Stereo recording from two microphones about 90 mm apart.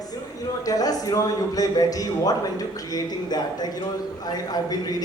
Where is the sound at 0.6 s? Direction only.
40° left (ahead or behind).